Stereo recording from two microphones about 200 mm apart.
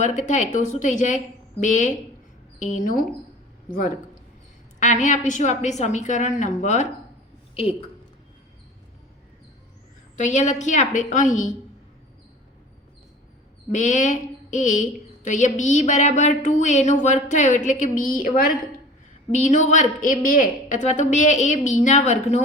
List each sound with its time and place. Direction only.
0.0 s a woman's voice: 40° left (ahead or behind)
10.2 s a woman's voice: 35° left (ahead or behind)
13.7 s a woman's voice: 40° left (ahead or behind)